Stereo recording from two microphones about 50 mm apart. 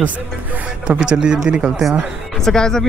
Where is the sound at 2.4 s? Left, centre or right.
Centre.